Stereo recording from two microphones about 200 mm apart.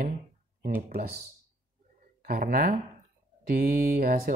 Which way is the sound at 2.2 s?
50° right (ahead or behind).